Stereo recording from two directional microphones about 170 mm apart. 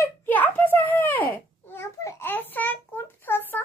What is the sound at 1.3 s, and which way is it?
Babbling, 15° left (ahead or behind).